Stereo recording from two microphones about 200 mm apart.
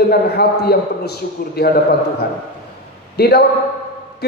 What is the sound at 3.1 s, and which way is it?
Speech, 50° left (ahead or behind).